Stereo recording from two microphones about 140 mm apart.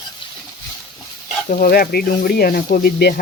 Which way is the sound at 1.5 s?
80° left.